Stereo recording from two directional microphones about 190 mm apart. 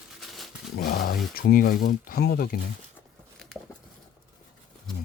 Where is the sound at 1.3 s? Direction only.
50° left (ahead or behind).